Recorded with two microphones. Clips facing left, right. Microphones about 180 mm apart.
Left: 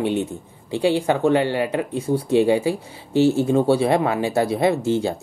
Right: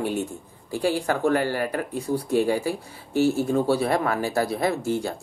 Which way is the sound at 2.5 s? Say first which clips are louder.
Left 5 dB; centre (ahead or behind).